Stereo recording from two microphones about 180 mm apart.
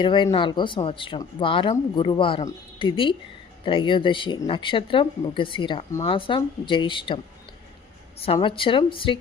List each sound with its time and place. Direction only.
0.0 s a woman's voice: 25° left (ahead or behind)
8.2 s speech: 30° left (ahead or behind)